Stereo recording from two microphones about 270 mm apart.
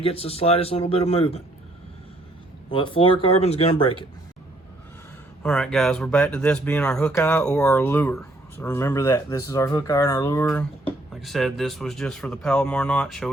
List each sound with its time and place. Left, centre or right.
0.0 s speech: left
2.6 s speech: centre
5.4 s speech: centre